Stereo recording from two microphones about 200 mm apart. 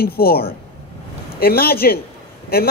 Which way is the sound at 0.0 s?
50° left (ahead or behind).